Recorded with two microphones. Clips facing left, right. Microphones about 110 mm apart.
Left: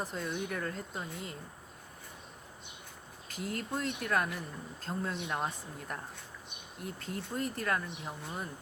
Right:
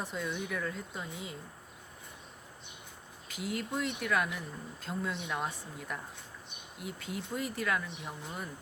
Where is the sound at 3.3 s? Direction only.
45° left (ahead or behind).